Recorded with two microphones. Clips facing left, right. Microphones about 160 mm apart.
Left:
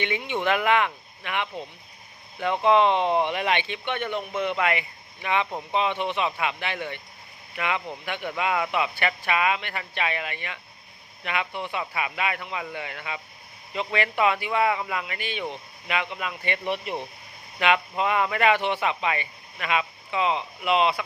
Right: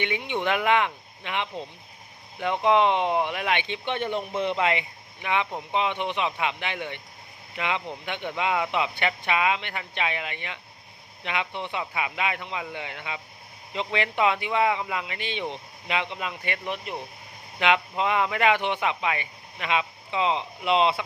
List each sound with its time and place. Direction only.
0.0 s speech: 15° right (ahead or behind)
3.8 s speech: 30° right (ahead or behind)
16.6 s speech: centre (ahead or behind)
17.6 s speech: 20° right (ahead or behind)